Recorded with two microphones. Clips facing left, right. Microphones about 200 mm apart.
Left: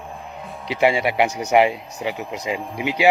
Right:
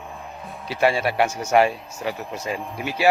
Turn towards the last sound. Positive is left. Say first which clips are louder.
# left 2 dB
turn(degrees=15)  # may be behind; listen again after turning